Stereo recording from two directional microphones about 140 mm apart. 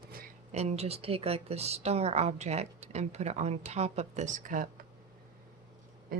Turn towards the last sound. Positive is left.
turn(degrees=-90)